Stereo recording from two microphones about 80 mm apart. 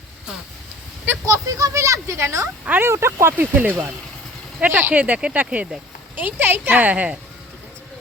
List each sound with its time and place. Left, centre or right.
1.2 s speech: right
2.6 s speech: right
2.9 s speech: right; by 7.2 s centre